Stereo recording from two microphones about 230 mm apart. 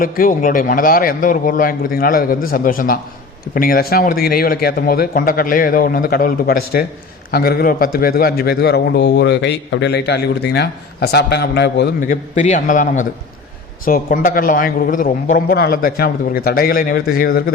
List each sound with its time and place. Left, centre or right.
0.0 s a man's voice: left
12.0 s a man's voice: left